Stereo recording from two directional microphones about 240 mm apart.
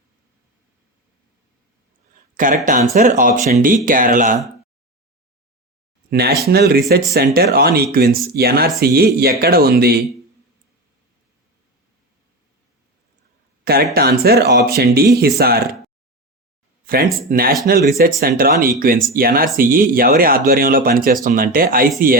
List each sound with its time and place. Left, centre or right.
2.3 s speech: right
6.1 s speech: right
13.9 s speech: right
16.8 s speech: right